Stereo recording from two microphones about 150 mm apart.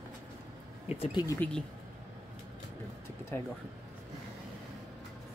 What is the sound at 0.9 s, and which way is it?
Speech, 35° left (ahead or behind).